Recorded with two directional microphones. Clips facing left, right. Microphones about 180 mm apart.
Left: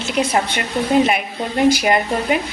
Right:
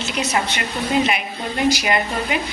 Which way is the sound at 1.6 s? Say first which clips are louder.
Left 4 dB; 50° left (ahead or behind).